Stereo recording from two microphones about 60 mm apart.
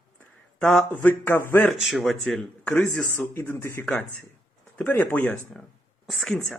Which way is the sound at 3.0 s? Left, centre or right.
Left.